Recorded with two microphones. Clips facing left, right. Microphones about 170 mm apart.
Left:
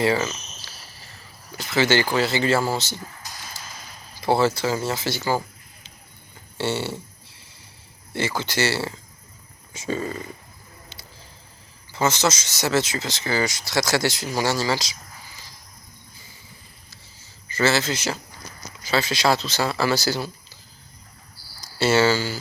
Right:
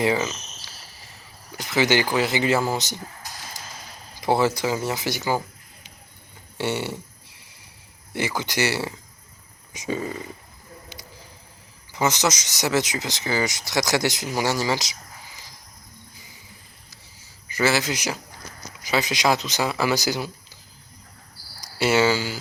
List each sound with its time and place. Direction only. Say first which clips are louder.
0.0 s speech: left 1 dB; 15° right (ahead or behind)
3.6 s a sound: even; 15° right (ahead or behind)
4.2 s speech: left 1 dB; 15° right (ahead or behind)
6.6 s speech: left 1 dB; 15° right (ahead or behind)
8.1 s speech: left 1 dB; 15° right (ahead or behind)
11.9 s speech: left 1 dB; 15° right (ahead or behind)
17.5 s speech: left 1 dB; 15° right (ahead or behind)
21.6 s speech: left 1 dB; 15° right (ahead or behind)